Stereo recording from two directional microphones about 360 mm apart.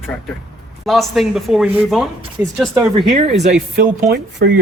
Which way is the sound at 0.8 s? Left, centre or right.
Centre.